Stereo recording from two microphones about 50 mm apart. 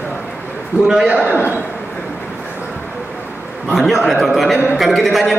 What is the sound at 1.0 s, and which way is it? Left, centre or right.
Speech, right.